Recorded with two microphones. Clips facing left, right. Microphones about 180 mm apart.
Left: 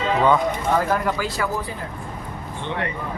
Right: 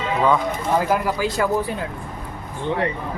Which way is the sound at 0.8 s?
10° right (ahead or behind).